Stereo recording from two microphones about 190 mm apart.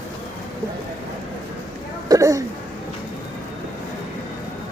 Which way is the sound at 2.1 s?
15° right (ahead or behind).